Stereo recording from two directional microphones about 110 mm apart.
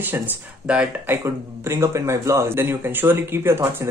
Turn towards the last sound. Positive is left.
turn(degrees=-25)  # may be behind; listen again after turning